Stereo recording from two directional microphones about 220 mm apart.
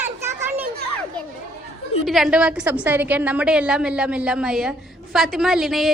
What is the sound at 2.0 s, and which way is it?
A woman's voice, centre (ahead or behind).